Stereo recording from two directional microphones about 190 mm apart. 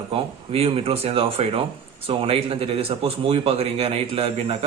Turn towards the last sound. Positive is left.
turn(degrees=-30)  # may be behind; listen again after turning